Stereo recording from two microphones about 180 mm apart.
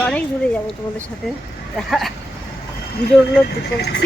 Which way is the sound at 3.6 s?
65° left (ahead or behind).